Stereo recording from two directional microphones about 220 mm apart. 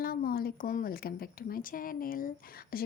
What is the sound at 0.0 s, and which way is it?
Speech, 40° left (ahead or behind).